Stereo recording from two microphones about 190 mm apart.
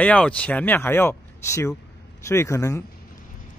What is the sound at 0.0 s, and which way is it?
Speech, 5° left (ahead or behind).